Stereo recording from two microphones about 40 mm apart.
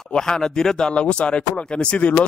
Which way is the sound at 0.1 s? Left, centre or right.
Centre.